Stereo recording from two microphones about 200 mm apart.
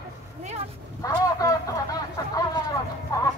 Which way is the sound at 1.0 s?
15° left (ahead or behind).